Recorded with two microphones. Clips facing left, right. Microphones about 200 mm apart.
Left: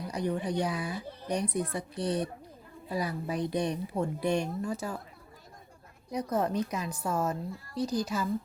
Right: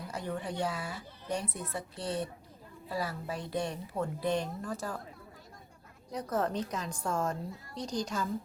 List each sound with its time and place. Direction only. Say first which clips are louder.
0.1 s speech: left 6 dB; 15° left (ahead or behind)
6.1 s speech: left 3 dB; 10° left (ahead or behind)